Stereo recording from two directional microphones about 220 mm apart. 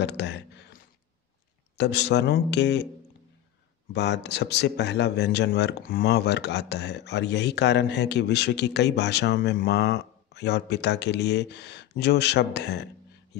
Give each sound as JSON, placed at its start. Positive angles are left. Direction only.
{"t": 0.0, "sound": "speech", "side_deg": 50}
{"t": 1.8, "sound": "speech", "side_deg": 50}
{"t": 3.9, "sound": "speech", "side_deg": 50}